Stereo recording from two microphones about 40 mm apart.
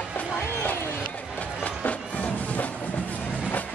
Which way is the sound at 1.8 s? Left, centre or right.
Left.